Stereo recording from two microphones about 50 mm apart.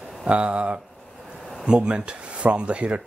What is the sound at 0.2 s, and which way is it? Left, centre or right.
Speech, right.